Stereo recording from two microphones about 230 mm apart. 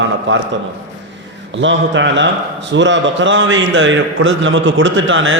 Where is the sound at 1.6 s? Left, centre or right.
Right.